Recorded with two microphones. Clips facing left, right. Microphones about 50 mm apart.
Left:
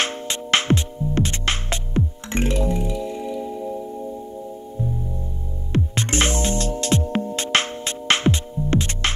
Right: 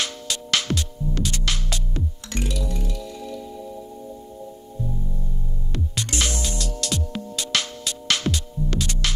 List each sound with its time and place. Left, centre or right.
0.0 s music: left
2.7 s music: left
5.7 s music: left